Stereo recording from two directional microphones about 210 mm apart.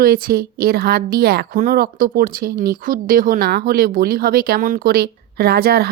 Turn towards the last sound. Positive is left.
turn(degrees=-50)  # may be behind; listen again after turning